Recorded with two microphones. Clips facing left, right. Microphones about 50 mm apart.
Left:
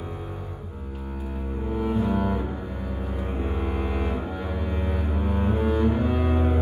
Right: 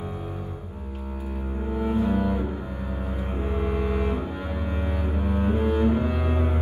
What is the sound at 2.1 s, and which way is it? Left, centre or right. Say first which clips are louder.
Double bass: even; left.